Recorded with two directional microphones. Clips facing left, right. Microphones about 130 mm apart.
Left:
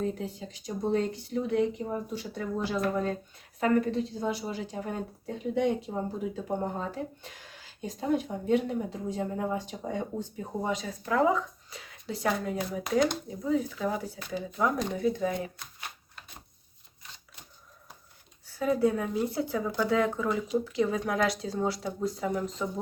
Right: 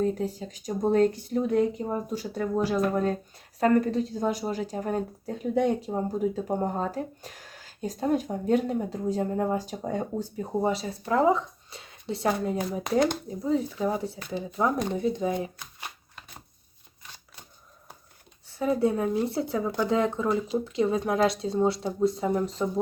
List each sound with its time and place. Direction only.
0.1 s speech: 40° right (ahead or behind)
3.6 s a woman's voice: 40° right (ahead or behind); by 15.4 s 20° right (ahead or behind)
18.4 s speech: 25° right (ahead or behind)